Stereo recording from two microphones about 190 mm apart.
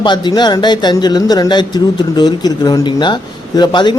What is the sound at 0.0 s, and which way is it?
Speech, 25° left (ahead or behind).